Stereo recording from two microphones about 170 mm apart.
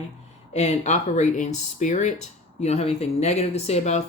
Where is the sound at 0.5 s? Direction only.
40° left (ahead or behind).